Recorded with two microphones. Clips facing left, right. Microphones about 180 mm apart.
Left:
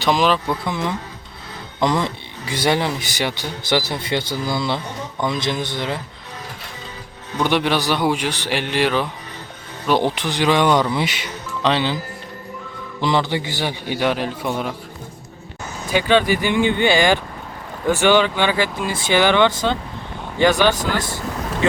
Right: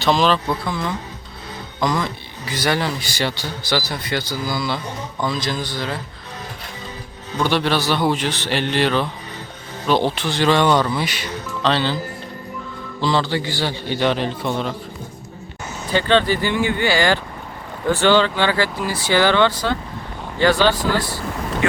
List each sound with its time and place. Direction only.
0.0 s speech: 15° left (ahead or behind)
7.3 s speech: 15° left (ahead or behind)
13.0 s speech: 20° left (ahead or behind)
15.9 s speech: 10° left (ahead or behind)